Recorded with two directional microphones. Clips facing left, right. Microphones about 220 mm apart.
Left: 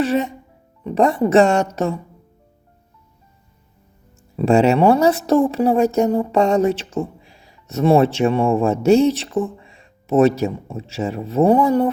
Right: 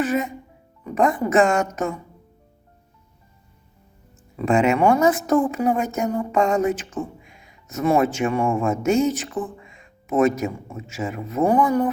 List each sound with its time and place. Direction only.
0.0 s a woman's voice: 30° left (ahead or behind)
4.4 s speech: 35° left (ahead or behind)